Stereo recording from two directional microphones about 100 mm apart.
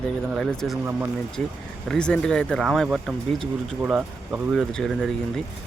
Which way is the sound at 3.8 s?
15° right (ahead or behind).